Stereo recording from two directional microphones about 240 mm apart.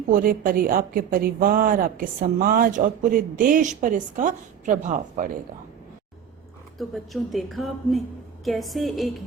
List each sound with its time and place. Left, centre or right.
0.1 s a woman's voice: right
6.7 s a woman's voice: centre